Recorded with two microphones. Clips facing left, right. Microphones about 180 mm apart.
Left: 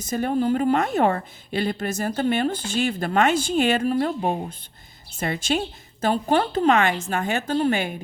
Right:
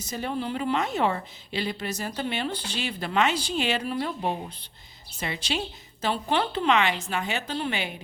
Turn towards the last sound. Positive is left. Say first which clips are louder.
# left 8 dB
turn(degrees=45)  # may be behind; listen again after turning